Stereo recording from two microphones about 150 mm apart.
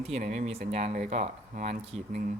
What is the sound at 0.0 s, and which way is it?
Speech, 45° right (ahead or behind).